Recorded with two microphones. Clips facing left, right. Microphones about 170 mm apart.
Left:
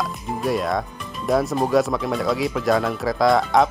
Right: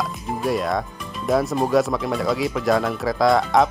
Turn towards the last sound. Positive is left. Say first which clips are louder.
# even
turn(degrees=0)  # may be behind; listen again after turning